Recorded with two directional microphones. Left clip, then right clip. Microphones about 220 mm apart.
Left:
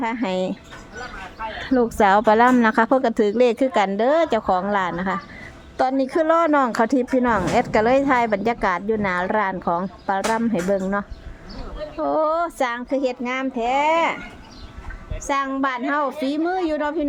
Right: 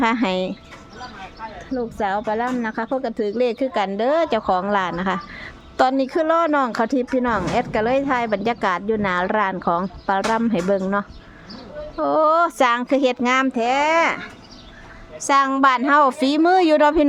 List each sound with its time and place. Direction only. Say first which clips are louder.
0.0 s speech: right 3 dB; 15° right (ahead or behind)
1.7 s a woman's voice: left 7 dB; 15° left (ahead or behind); by 14.2 s 20° right (ahead or behind)
15.3 s a woman's voice: right 7 dB; 25° right (ahead or behind)